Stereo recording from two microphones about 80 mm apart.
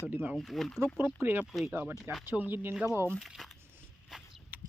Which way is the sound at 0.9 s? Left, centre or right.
Right.